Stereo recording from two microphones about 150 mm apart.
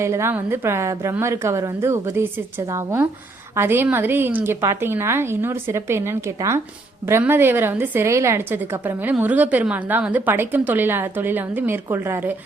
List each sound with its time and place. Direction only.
0.0 s a woman's voice: 20° right (ahead or behind)